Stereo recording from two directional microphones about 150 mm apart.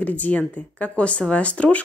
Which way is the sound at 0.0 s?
10° left (ahead or behind).